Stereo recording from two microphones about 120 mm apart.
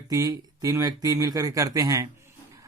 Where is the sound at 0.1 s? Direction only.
30° right (ahead or behind).